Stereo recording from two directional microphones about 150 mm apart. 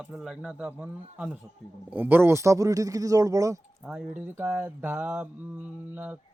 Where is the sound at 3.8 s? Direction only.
5° right (ahead or behind).